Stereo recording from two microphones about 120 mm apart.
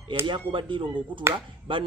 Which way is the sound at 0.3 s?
45° right (ahead or behind).